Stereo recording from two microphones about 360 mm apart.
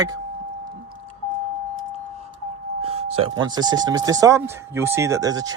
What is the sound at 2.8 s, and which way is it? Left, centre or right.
Speech, centre.